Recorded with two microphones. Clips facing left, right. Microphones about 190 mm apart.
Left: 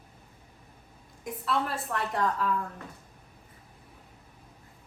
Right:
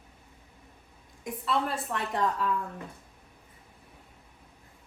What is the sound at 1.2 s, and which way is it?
A woman's voice, centre (ahead or behind).